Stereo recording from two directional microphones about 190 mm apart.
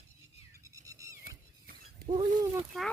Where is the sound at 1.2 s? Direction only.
50° right (ahead or behind).